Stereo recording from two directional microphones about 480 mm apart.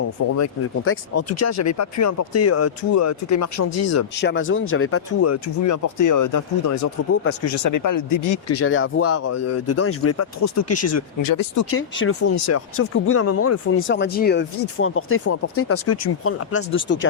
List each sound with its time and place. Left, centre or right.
0.3 s speech: left
4.1 s speech: left
11.2 s speech: left
11.6 s speech: left